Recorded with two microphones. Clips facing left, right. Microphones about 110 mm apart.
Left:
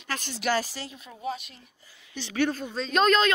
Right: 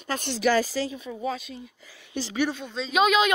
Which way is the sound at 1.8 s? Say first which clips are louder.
Right 6 dB; 90° right.